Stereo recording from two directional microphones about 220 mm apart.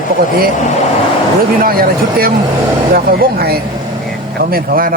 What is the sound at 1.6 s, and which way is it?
Speech, 40° right (ahead or behind).